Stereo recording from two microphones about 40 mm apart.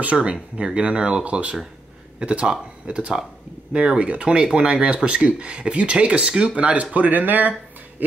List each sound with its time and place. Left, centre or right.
0.0 s speech: right